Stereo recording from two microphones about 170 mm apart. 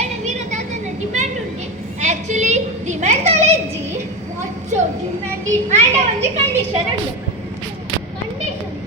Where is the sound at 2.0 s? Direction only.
45° right (ahead or behind).